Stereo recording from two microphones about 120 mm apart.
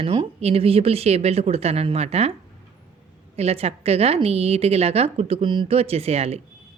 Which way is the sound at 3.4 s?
60° right (ahead or behind).